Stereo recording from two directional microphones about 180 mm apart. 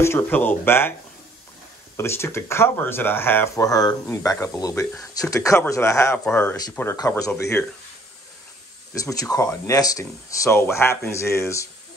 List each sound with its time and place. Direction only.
0.0 s speech: 10° left (ahead or behind)
2.0 s speech: 15° left (ahead or behind)
8.9 s speech: 20° left (ahead or behind)